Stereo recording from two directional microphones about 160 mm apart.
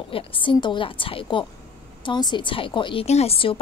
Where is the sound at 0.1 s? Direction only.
35° left (ahead or behind).